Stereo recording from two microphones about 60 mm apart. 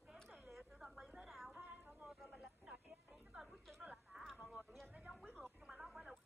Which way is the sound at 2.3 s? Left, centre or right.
Centre.